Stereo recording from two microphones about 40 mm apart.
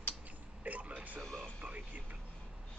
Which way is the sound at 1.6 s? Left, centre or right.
Right.